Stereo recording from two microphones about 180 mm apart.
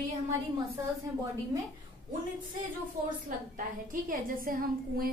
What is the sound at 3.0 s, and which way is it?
A woman's voice, 50° right (ahead or behind).